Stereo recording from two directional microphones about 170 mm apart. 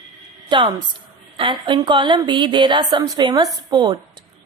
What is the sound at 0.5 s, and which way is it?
A woman's voice, 25° right (ahead or behind).